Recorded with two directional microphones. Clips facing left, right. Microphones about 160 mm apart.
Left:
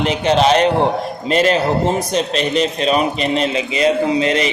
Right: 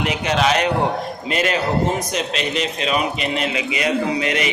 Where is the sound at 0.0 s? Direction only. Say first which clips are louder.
Left 5 dB; 30° left (ahead or behind).